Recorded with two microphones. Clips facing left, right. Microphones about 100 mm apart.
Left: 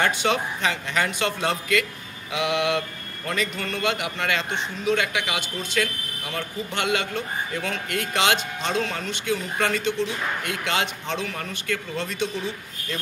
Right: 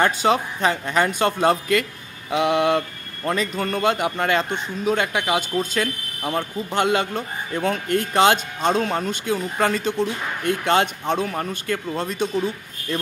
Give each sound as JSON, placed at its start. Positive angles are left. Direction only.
{"t": 0.0, "sound": "a man's voice", "side_deg": -35}
{"t": 6.7, "sound": "a man's voice", "side_deg": -40}
{"t": 9.3, "sound": "speech", "side_deg": -25}
{"t": 9.8, "sound": "a man's voice", "side_deg": -40}
{"t": 11.3, "sound": "speech", "side_deg": -25}